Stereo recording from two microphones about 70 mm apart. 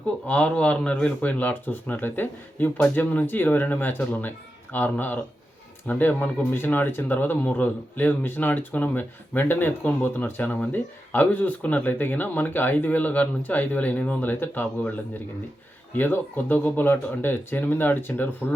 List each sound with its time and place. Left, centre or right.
0.3 s speech: centre
16.0 s speech: left